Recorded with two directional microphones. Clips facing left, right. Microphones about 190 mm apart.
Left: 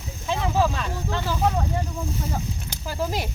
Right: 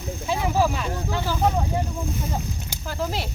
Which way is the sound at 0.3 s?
10° right (ahead or behind).